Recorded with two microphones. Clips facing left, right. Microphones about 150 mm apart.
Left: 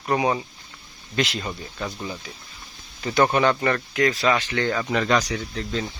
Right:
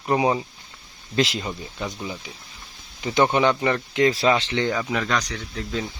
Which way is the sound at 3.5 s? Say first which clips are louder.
Even; 15° right (ahead or behind).